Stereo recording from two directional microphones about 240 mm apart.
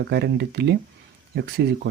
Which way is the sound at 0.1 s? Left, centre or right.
Right.